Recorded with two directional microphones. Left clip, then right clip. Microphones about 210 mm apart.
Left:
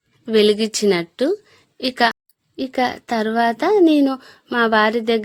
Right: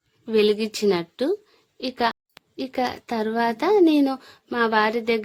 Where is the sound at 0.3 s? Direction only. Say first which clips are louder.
Left 5 dB; 15° left (ahead or behind).